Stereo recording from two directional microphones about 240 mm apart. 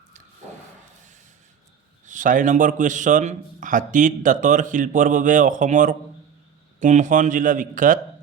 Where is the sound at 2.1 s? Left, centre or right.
Right.